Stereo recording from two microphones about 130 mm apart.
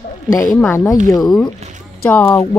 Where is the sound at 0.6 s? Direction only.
20° left (ahead or behind).